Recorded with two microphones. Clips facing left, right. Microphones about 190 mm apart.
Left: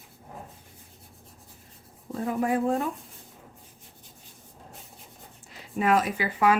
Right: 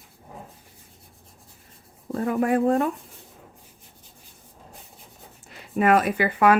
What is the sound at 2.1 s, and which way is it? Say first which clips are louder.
Speech: right 4 dB; 65° right (ahead or behind).